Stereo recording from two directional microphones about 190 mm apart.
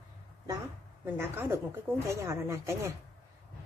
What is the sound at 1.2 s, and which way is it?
A woman's voice, 10° right (ahead or behind).